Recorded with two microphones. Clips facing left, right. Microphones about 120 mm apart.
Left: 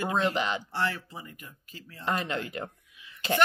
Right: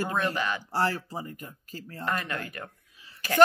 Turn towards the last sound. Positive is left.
turn(degrees=-35)  # may be behind; listen again after turning